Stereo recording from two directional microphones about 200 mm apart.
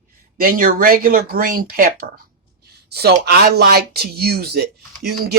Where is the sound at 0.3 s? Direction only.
45° right (ahead or behind).